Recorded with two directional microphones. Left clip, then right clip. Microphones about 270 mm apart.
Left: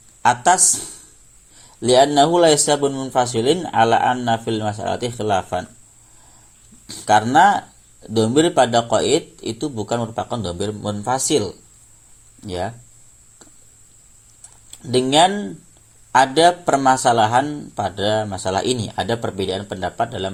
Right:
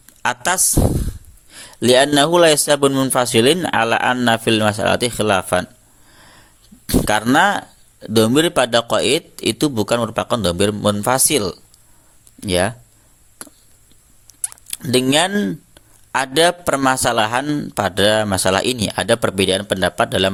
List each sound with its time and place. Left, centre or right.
0.2 s speech: right
6.8 s speech: right
14.4 s speech: right